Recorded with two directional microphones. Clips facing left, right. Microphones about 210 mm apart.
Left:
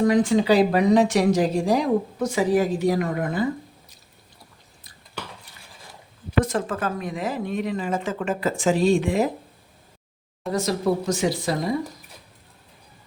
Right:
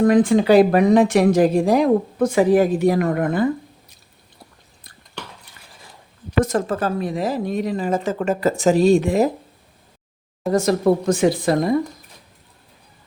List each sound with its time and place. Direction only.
0.0 s speech: 55° right (ahead or behind)
6.4 s a woman's voice: 40° right (ahead or behind)
10.5 s speech: 50° right (ahead or behind)